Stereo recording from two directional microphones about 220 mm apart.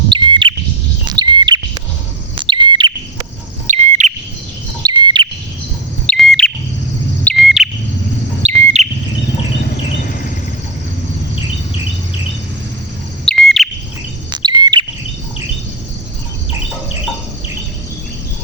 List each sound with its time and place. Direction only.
0.1 s bird: 20° right (ahead or behind)
3.7 s bird: 35° right (ahead or behind)
4.8 s bird: 20° right (ahead or behind)
6.1 s bird: 5° left (ahead or behind)
7.3 s chirp: centre (ahead or behind)
8.4 s chirp: 30° right (ahead or behind)
13.2 s chirp: centre (ahead or behind)
14.3 s bird: 20° right (ahead or behind)